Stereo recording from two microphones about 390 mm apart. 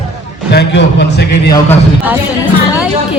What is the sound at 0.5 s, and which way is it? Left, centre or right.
Speech, left.